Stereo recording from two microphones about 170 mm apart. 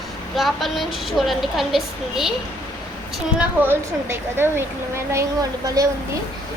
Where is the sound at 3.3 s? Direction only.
10° right (ahead or behind).